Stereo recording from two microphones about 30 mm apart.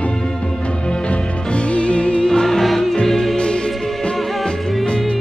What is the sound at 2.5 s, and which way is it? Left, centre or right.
Music, centre.